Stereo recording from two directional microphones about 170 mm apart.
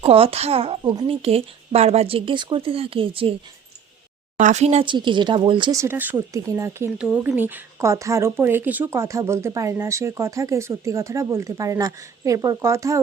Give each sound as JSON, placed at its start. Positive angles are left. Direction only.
{"t": 0.0, "sound": "speech", "side_deg": -35}
{"t": 4.4, "sound": "speech", "side_deg": -45}
{"t": 5.8, "sound": "speech", "side_deg": -10}